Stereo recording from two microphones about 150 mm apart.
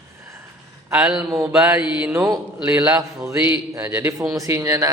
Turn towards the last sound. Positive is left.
turn(degrees=-20)  # may be behind; listen again after turning